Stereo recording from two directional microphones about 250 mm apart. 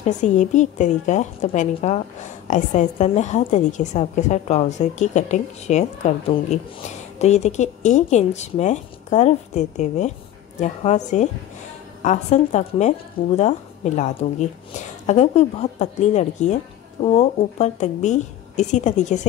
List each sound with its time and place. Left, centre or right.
0.0 s a woman's voice: left